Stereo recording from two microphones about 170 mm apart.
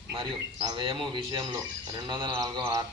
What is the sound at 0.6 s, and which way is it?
Speech, 25° right (ahead or behind).